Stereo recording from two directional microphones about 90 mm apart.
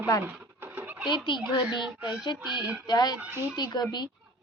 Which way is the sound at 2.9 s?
50° left (ahead or behind).